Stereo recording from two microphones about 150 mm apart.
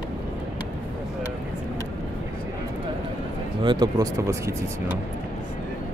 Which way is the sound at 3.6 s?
25° right (ahead or behind).